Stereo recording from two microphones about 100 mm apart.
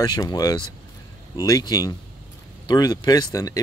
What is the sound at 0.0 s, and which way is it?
Speech, 45° left (ahead or behind).